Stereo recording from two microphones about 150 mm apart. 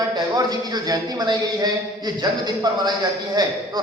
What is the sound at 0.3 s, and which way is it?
A man's voice, 25° right (ahead or behind).